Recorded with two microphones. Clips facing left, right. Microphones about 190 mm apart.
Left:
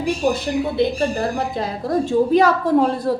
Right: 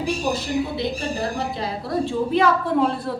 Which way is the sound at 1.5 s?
45° left (ahead or behind).